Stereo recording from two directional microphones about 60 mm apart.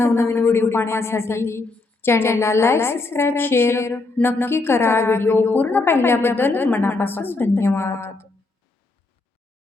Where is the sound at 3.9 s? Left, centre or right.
Left.